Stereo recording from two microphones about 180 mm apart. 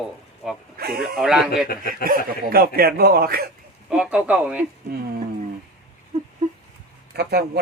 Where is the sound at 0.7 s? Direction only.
60° right (ahead or behind).